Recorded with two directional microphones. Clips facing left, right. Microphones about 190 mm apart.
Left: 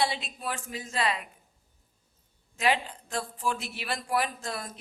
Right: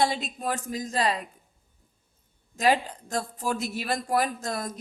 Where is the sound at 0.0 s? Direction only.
45° right (ahead or behind).